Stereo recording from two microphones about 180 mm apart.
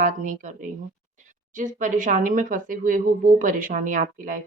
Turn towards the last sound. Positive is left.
turn(degrees=-45)  # may be behind; listen again after turning